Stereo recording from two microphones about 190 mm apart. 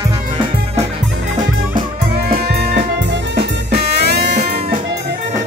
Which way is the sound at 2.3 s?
60° right (ahead or behind).